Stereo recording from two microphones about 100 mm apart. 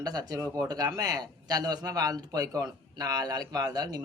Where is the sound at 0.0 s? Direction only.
40° right (ahead or behind).